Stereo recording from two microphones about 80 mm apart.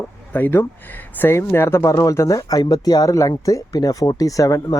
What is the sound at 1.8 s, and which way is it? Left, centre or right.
Speech, left.